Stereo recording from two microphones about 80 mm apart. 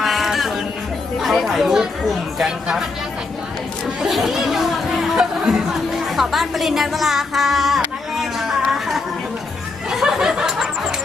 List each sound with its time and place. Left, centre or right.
0.0 s music: centre
1.2 s chatter: centre
3.8 s chatter: centre
6.1 s speech: centre
8.2 s a sound: centre